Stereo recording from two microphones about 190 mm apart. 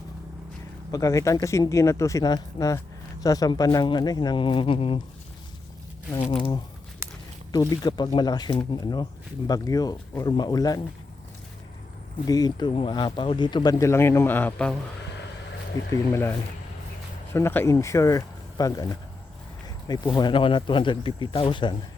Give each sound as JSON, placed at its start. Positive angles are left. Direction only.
{"t": 0.9, "sound": "speech", "side_deg": 20}
{"t": 6.3, "sound": "speech", "side_deg": 25}
{"t": 12.2, "sound": "speech", "side_deg": 20}
{"t": 15.9, "sound": "speech", "side_deg": 15}
{"t": 17.3, "sound": "speech", "side_deg": 10}
{"t": 20.1, "sound": "speech", "side_deg": 25}